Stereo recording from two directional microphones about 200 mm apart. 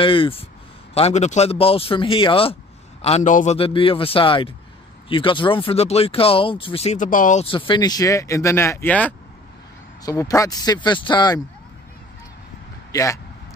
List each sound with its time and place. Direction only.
0.0 s speech: 25° left (ahead or behind)
7.4 s speech: 25° left (ahead or behind)
12.9 s speech: 15° left (ahead or behind)